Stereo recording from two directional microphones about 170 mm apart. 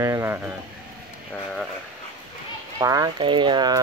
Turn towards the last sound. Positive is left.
turn(degrees=-25)  # may be behind; listen again after turning